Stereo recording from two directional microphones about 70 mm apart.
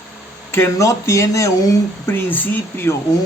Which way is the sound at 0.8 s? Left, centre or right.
Left.